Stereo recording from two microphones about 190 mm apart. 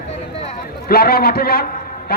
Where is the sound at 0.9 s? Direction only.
55° left (ahead or behind).